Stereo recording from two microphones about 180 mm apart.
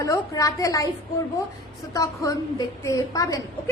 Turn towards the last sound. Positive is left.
turn(degrees=20)  # may be behind; listen again after turning